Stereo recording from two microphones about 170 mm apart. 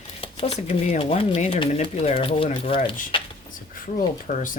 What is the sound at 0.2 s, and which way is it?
Speech, 35° left (ahead or behind).